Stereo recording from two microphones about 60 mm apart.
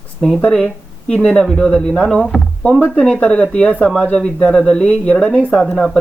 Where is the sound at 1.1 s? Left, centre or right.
Centre.